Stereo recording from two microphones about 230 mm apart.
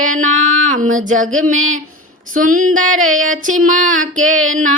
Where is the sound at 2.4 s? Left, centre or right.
Right.